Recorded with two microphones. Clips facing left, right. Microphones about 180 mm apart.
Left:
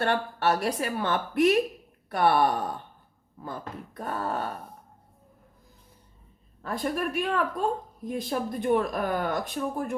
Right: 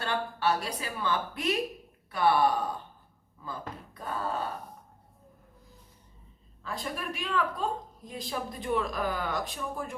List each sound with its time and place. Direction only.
0.0 s a woman's voice: 60° left (ahead or behind)
6.6 s a woman's voice: 55° left (ahead or behind)